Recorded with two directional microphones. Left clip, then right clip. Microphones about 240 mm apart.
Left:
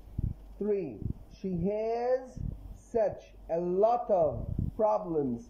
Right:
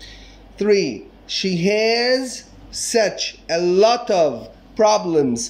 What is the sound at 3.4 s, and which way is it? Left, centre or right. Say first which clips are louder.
Speech: right 12 dB; right.